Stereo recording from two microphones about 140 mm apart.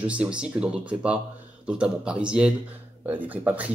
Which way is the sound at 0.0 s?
10° right (ahead or behind).